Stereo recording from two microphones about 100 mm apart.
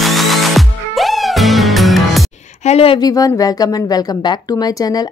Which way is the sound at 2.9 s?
40° left (ahead or behind).